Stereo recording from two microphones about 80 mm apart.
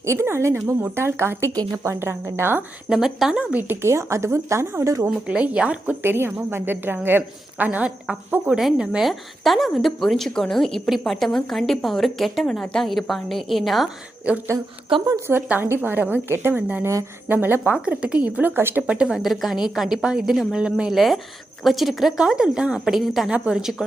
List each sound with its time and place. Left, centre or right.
0.0 s a woman's voice: right
1.5 s a woman's voice: right
2.9 s speech: centre
3.8 s a woman's voice: right
5.0 s a woman's voice: centre
15.3 s a woman's voice: right
17.7 s speech: centre
18.5 s a woman's voice: right
18.8 s a woman's voice: centre